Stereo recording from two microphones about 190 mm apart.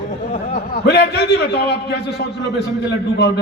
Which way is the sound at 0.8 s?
60° left (ahead or behind).